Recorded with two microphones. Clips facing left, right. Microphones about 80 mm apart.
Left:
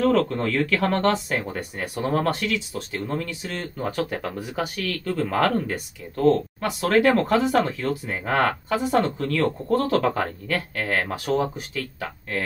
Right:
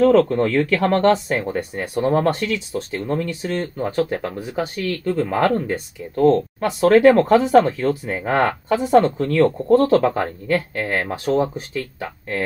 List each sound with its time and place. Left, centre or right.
0.0 s speech: right